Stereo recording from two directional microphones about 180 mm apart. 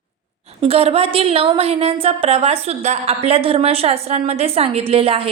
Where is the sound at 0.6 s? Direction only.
30° right (ahead or behind).